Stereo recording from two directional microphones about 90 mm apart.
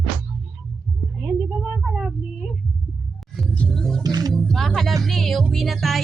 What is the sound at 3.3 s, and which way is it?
Music, centre (ahead or behind).